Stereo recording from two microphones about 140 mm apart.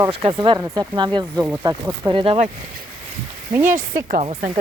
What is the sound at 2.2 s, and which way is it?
Speech, 45° right (ahead or behind).